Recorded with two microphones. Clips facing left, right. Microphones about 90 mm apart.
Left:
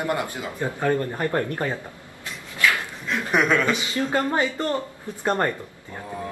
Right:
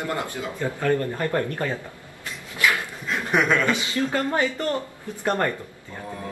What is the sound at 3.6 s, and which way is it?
Speech, 20° left (ahead or behind).